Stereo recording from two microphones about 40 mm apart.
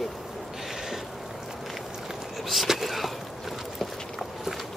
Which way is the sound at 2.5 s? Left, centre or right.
Centre.